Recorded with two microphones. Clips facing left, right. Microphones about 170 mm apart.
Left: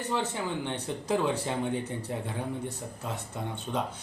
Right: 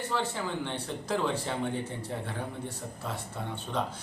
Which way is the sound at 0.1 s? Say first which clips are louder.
Left 2 dB; 15° left (ahead or behind).